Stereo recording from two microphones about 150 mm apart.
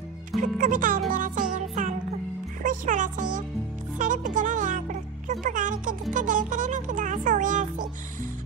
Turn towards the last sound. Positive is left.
turn(degrees=-60)  # may be behind; listen again after turning